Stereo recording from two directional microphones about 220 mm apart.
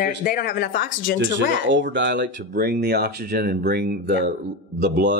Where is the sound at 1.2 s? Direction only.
55° right (ahead or behind).